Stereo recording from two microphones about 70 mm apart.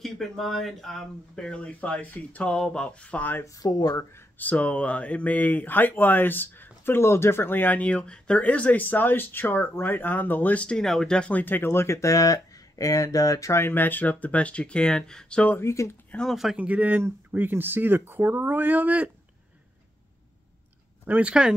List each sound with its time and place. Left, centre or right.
0.0 s speech: centre; by 3.4 s left
3.6 s speech: left
4.4 s speech: left
13.6 s speech: left; by 15.5 s centre
15.6 s speech: left
16.2 s speech: centre
16.5 s speech: right
21.1 s speech: centre